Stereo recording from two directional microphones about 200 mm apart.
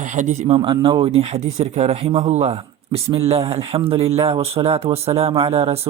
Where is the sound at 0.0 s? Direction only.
40° right (ahead or behind).